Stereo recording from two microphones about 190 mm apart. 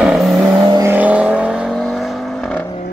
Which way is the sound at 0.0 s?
Centre (ahead or behind).